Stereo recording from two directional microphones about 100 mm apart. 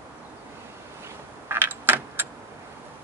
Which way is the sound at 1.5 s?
20° right (ahead or behind).